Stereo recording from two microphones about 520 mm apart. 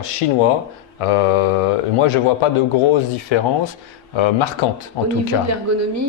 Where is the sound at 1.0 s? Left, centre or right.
Left.